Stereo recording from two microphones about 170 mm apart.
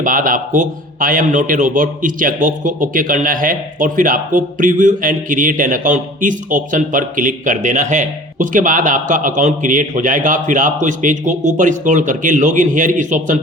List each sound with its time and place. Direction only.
0.0 s a man's voice: 55° right (ahead or behind)